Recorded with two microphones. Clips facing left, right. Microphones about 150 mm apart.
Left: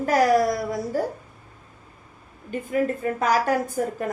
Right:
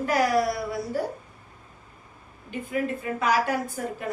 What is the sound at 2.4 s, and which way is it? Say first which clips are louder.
A woman's voice: left 4 dB; 45° left (ahead or behind).